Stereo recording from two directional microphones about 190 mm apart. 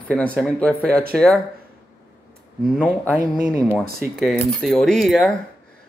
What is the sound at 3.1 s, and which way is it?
Speech, 40° left (ahead or behind).